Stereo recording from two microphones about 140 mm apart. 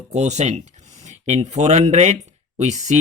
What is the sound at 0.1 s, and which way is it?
Speech, 55° right (ahead or behind).